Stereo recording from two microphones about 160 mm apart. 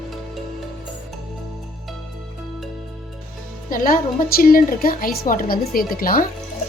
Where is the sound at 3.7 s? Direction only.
60° left (ahead or behind).